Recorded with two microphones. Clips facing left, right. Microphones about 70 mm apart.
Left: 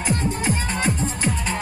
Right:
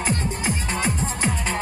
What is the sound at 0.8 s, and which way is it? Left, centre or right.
Music, right.